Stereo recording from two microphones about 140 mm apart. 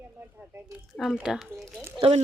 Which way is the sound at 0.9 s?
5° right (ahead or behind).